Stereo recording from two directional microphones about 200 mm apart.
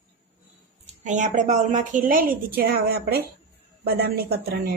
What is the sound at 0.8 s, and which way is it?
A woman's voice, 35° right (ahead or behind).